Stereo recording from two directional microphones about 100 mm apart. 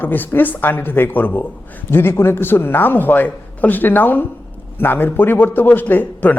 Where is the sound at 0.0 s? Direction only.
20° left (ahead or behind).